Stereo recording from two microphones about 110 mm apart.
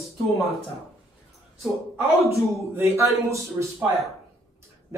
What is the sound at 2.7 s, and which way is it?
Speech, 25° right (ahead or behind).